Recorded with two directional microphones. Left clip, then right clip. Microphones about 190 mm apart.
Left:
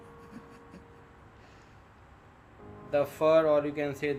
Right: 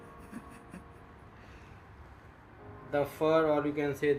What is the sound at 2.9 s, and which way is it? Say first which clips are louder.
Speech: left 4 dB; 30° left (ahead or behind).